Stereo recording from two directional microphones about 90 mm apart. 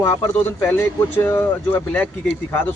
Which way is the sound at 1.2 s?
20° left (ahead or behind).